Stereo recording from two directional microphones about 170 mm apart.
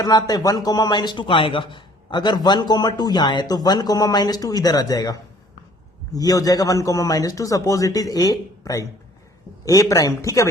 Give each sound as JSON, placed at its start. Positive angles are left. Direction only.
{"t": 0.0, "sound": "speech", "side_deg": 25}